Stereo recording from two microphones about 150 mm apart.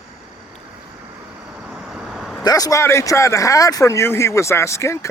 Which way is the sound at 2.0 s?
5° right (ahead or behind).